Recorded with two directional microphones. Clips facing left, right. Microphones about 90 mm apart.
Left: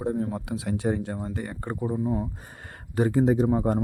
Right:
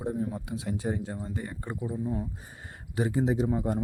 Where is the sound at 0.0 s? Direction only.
60° left (ahead or behind).